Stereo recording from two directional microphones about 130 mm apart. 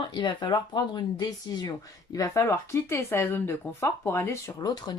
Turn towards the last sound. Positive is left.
turn(degrees=30)  # may be behind; listen again after turning